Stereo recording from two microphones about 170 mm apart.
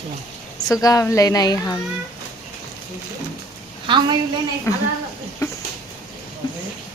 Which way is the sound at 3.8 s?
30° right (ahead or behind).